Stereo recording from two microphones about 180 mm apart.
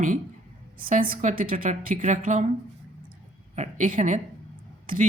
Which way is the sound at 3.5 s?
40° right (ahead or behind).